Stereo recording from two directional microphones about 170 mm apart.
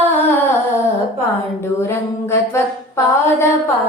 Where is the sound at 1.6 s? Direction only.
15° left (ahead or behind).